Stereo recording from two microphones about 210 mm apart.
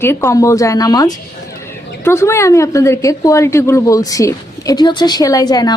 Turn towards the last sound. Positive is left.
turn(degrees=20)  # may be behind; listen again after turning